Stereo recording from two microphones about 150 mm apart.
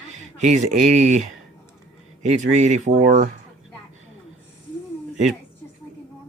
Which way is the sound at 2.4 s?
55° right (ahead or behind).